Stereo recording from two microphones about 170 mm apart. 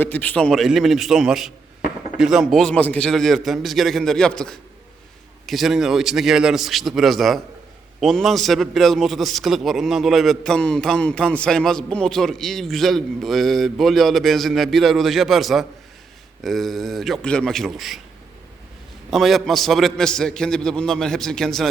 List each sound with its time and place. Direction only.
0.0 s a man's voice: 10° left (ahead or behind)
19.1 s a man's voice: centre (ahead or behind)